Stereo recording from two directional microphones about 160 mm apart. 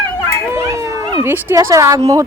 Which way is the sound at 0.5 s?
20° right (ahead or behind).